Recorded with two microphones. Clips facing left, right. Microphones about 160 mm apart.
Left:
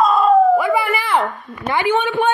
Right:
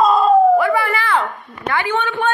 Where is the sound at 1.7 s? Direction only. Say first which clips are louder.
Left 3 dB; 20° left (ahead or behind).